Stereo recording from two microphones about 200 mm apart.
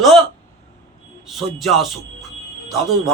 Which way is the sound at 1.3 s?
Centre (ahead or behind).